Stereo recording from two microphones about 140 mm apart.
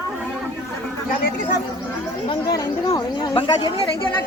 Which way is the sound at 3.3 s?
30° left (ahead or behind).